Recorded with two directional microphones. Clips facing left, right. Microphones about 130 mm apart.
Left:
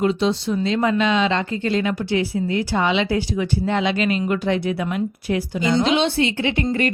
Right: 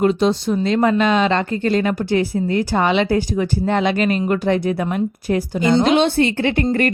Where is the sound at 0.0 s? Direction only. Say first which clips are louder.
Right 3 dB; 50° right (ahead or behind).